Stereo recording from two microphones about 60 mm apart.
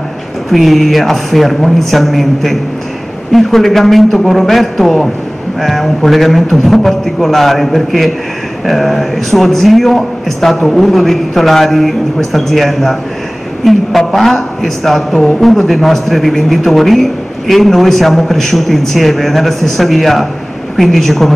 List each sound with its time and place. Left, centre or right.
0.5 s a woman's voice: centre